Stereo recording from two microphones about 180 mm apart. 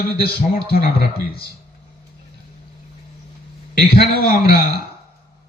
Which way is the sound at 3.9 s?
55° left (ahead or behind).